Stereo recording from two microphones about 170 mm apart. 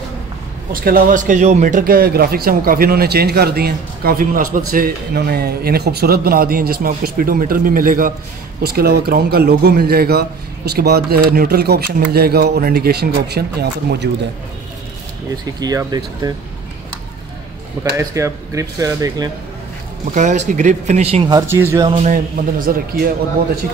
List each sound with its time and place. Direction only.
0.8 s speech: 55° right (ahead or behind)
8.6 s speech: 65° right (ahead or behind)
15.6 s speech: 20° right (ahead or behind)
17.9 s speech: 15° right (ahead or behind)
20.2 s speech: 50° right (ahead or behind)
21.4 s speech: 15° right (ahead or behind)
21.8 s speech: 45° right (ahead or behind)
22.7 s speech: 60° right (ahead or behind)